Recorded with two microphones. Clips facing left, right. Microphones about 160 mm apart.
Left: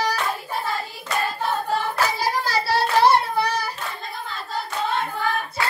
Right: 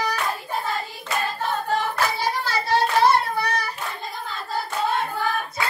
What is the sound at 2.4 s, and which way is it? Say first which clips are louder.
Child singing: right 3 dB; 35° left (ahead or behind).